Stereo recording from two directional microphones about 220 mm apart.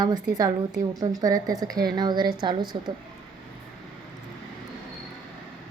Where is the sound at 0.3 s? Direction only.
15° right (ahead or behind).